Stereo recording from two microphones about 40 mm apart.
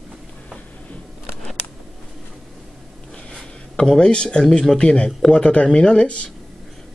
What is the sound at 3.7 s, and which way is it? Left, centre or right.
Speech, centre.